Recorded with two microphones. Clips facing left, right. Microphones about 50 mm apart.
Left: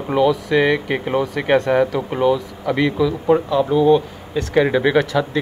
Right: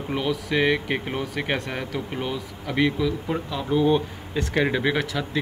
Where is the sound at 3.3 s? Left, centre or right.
Left.